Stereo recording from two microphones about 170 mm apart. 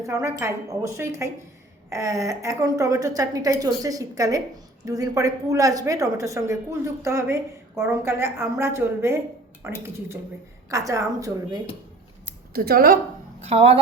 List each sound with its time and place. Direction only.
0.0 s a woman's voice: 15° right (ahead or behind)
12.5 s speech: 60° right (ahead or behind)
13.4 s speech: 35° right (ahead or behind)